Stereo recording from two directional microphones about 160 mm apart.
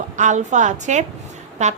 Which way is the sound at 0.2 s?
50° right (ahead or behind).